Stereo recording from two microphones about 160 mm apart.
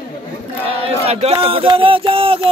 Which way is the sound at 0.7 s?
35° right (ahead or behind).